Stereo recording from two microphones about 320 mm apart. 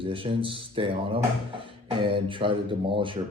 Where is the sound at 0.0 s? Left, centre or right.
Centre.